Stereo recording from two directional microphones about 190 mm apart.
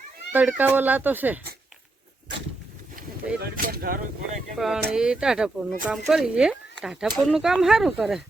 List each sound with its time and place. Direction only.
0.3 s speech: 10° right (ahead or behind)
3.4 s speech: 50° right (ahead or behind)
4.5 s speech: centre (ahead or behind)